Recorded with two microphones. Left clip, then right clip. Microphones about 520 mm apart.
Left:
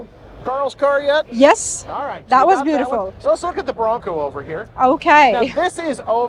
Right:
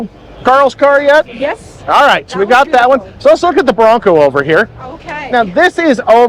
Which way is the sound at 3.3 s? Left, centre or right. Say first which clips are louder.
Right 11 dB; right.